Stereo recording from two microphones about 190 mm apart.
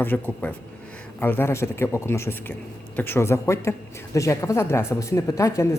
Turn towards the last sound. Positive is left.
turn(degrees=15)  # may be behind; listen again after turning